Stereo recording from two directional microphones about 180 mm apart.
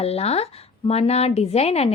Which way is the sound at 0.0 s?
35° left (ahead or behind).